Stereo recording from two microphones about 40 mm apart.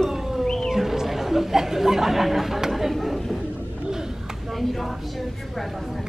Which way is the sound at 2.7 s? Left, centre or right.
Centre.